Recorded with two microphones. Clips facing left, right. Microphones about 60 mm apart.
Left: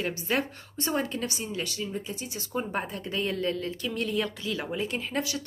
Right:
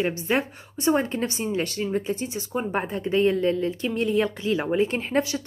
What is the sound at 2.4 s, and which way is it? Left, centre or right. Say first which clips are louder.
A woman's voice: right 4 dB; right.